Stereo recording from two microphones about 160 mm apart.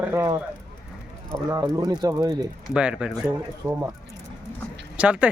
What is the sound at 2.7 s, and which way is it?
Speech, 5° right (ahead or behind).